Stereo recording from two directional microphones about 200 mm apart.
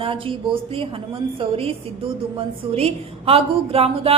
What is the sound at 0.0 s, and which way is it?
A woman's voice, 25° right (ahead or behind).